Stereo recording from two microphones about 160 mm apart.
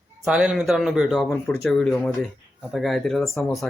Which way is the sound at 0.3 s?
5° right (ahead or behind).